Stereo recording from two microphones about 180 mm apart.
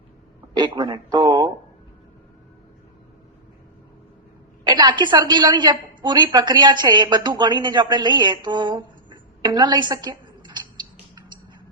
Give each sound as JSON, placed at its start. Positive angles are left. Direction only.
{"t": 0.5, "sound": "speech", "side_deg": -25}
{"t": 4.6, "sound": "a woman's voice", "side_deg": -25}